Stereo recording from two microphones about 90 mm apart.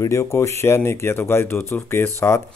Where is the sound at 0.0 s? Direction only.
35° left (ahead or behind).